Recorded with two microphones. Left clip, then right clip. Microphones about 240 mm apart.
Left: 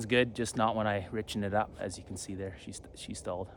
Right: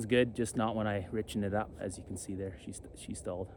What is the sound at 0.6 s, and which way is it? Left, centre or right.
Speech, left.